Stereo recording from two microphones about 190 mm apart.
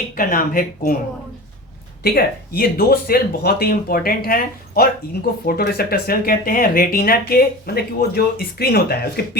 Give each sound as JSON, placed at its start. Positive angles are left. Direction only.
{"t": 0.2, "sound": "speech", "side_deg": 45}
{"t": 2.0, "sound": "speech", "side_deg": 55}